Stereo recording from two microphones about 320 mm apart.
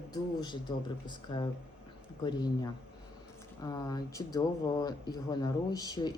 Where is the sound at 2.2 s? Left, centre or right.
Centre.